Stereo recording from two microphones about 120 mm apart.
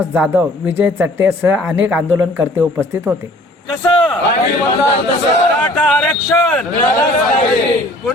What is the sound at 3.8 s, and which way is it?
Speech, 45° left (ahead or behind).